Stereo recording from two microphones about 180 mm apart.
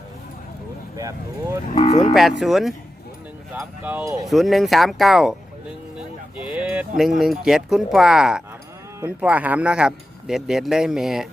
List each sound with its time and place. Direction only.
0.9 s speech: 20° right (ahead or behind)
1.7 s speech: 35° left (ahead or behind)
2.4 s speech: centre (ahead or behind); by 4.3 s 15° right (ahead or behind)
4.3 s speech: centre (ahead or behind)